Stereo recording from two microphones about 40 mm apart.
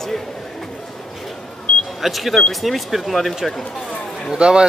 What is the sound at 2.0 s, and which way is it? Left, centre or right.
Speech, centre.